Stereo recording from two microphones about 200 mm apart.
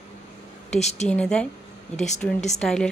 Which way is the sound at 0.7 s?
35° left (ahead or behind).